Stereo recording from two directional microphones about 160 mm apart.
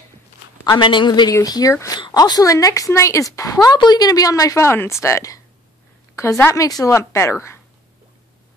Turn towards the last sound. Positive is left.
turn(degrees=15)  # may be behind; listen again after turning